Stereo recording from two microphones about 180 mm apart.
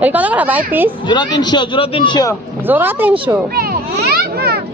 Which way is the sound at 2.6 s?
10° right (ahead or behind).